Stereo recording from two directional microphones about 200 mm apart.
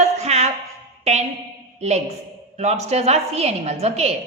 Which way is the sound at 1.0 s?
35° right (ahead or behind).